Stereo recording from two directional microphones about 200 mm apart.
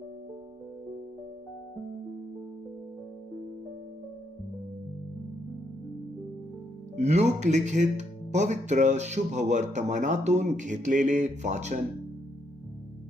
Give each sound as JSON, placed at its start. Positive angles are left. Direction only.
{"t": 6.9, "sound": "speech", "side_deg": -35}